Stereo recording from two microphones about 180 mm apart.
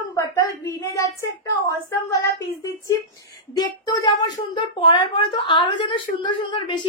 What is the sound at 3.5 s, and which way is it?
A woman's voice, 20° left (ahead or behind).